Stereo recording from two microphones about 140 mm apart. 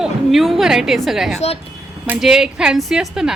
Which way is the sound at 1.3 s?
50° left (ahead or behind).